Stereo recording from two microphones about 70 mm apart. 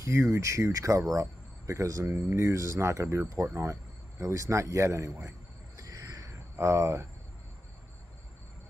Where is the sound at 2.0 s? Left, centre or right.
Right.